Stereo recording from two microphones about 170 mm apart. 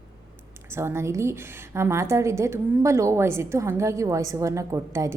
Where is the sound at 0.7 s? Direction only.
15° right (ahead or behind).